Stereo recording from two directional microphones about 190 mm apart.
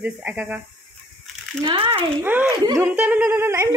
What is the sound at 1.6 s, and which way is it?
Speech, 25° right (ahead or behind).